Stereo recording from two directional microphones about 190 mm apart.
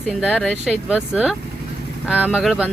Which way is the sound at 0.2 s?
Centre (ahead or behind).